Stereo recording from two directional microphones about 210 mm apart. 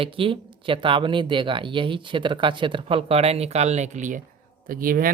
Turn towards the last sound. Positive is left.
turn(degrees=-40)  # may be behind; listen again after turning